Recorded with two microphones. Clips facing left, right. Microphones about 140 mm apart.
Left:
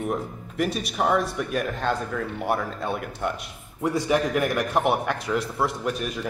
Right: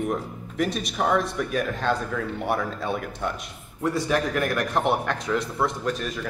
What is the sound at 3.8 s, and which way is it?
A man's voice, 15° left (ahead or behind).